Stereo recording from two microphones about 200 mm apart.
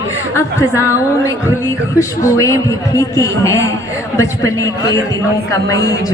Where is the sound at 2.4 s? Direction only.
15° left (ahead or behind).